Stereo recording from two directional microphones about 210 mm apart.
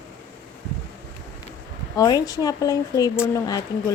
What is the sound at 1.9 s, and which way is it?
Speech, 15° left (ahead or behind).